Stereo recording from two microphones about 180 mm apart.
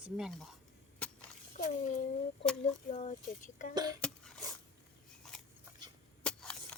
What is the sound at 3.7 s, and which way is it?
Speech, 20° right (ahead or behind).